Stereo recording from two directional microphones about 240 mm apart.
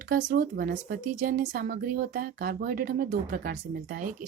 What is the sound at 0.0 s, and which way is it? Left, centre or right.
Speech, right.